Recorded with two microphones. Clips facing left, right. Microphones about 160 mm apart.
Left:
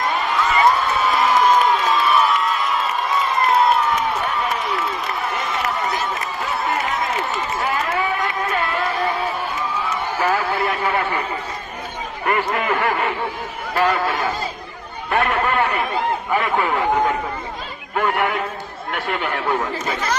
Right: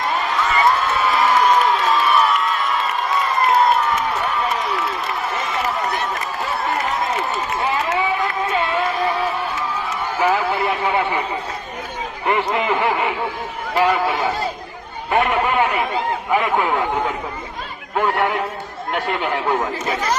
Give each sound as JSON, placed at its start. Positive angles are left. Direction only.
{"t": 0.0, "sound": "a sound", "side_deg": 0}
{"t": 5.3, "sound": "run", "side_deg": 0}
{"t": 7.6, "sound": "run", "side_deg": -25}
{"t": 8.4, "sound": "a sound", "side_deg": -25}
{"t": 10.2, "sound": "a man's voice", "side_deg": -15}
{"t": 12.2, "sound": "a man's voice", "side_deg": -20}
{"t": 17.9, "sound": "a man's voice", "side_deg": -10}